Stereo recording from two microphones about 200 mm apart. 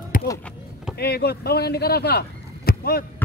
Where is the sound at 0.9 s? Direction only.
55° left (ahead or behind).